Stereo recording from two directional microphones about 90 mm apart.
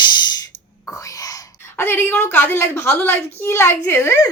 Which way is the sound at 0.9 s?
40° left (ahead or behind).